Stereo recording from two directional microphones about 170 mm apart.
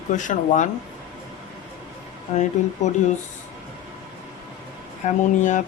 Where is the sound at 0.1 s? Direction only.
45° left (ahead or behind).